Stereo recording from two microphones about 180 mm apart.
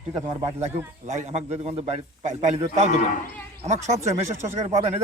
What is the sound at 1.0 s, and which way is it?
A man's voice, 40° right (ahead or behind).